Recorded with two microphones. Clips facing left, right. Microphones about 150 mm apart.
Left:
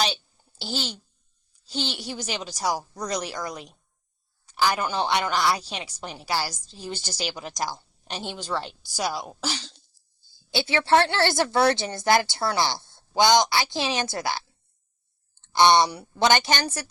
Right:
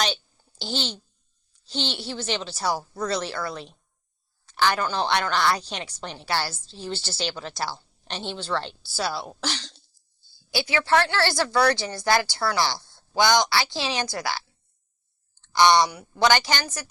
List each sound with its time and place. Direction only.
0.0 s a sound: 5° left (ahead or behind)
1.9 s a woman's voice: 10° left (ahead or behind)
10.3 s a woman's voice: 25° left (ahead or behind)